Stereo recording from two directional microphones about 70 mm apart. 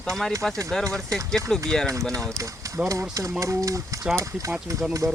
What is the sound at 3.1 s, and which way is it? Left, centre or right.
Speech, right.